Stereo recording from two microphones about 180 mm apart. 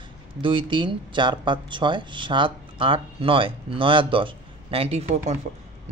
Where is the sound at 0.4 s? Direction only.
25° right (ahead or behind).